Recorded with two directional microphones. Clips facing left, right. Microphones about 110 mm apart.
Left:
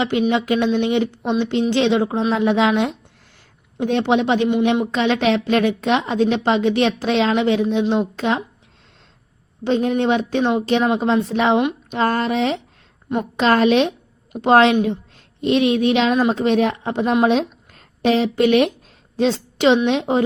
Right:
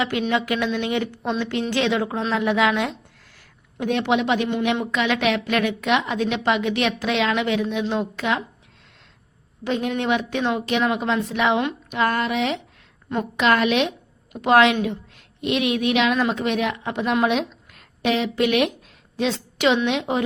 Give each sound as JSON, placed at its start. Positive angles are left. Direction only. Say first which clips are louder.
{"t": 0.0, "sound": "a woman's voice", "louder": "left 4 dB", "side_deg": 25}
{"t": 9.6, "sound": "a woman's voice", "louder": "left 5 dB", "side_deg": 30}